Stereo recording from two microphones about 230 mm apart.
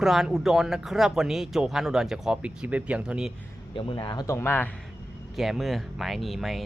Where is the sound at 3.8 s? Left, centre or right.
Centre.